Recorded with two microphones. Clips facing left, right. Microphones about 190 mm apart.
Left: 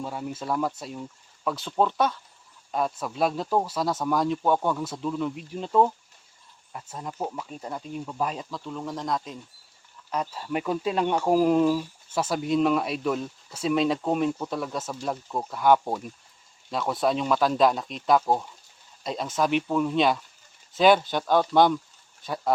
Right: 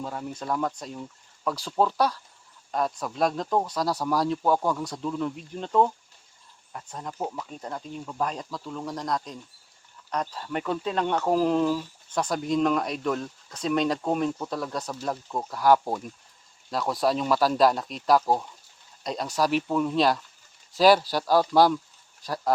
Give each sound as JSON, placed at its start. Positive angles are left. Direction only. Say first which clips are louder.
{"t": 0.0, "sound": "speech", "louder": "left 1 dB", "side_deg": 5}